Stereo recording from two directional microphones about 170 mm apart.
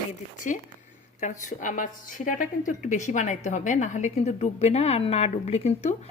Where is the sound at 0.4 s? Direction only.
45° left (ahead or behind).